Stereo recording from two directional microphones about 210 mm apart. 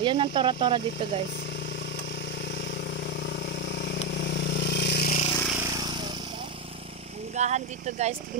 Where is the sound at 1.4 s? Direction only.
55° left (ahead or behind).